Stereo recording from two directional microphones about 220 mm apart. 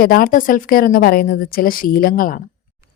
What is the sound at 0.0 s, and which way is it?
A woman's voice, 40° left (ahead or behind).